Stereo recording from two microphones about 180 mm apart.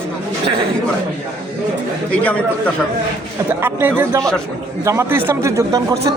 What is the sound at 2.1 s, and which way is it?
Speech, 10° left (ahead or behind).